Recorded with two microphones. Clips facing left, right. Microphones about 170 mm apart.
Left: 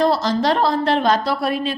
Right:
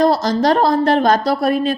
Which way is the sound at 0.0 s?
40° right (ahead or behind).